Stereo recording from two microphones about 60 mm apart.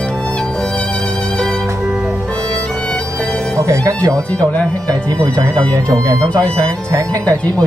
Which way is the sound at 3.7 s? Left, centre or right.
Right.